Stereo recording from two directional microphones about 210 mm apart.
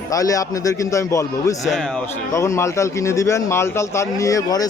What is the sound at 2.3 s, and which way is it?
A man's voice, 15° left (ahead or behind).